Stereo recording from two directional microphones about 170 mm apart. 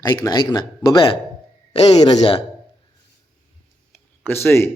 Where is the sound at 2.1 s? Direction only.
30° left (ahead or behind).